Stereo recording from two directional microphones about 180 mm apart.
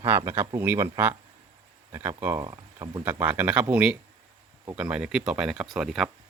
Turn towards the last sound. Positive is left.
turn(degrees=0)  # may be behind; listen again after turning